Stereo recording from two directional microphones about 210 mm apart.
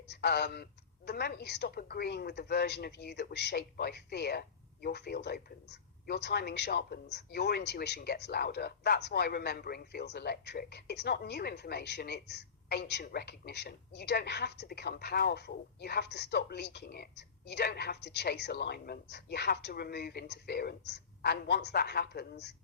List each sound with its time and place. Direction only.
0.1 s a woman's voice: 50° left (ahead or behind)